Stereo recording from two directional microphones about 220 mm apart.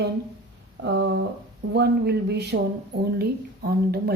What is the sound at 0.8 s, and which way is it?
Speech, 50° right (ahead or behind).